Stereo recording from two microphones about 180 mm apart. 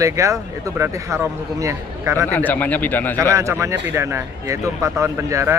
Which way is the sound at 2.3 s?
10° left (ahead or behind).